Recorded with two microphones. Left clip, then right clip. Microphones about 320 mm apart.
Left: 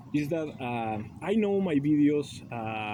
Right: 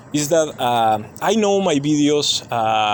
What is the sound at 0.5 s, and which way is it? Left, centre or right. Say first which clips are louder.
Speech: right 16 dB; right.